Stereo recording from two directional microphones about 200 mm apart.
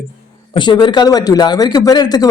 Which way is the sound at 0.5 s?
25° left (ahead or behind).